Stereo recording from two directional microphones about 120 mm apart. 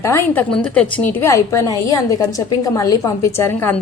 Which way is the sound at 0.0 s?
20° left (ahead or behind).